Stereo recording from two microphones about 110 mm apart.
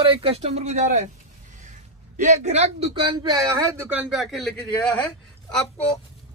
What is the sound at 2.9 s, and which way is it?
Speech, 50° right (ahead or behind).